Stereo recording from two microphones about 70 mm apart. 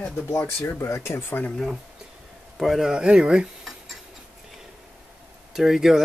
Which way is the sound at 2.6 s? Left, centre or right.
Centre.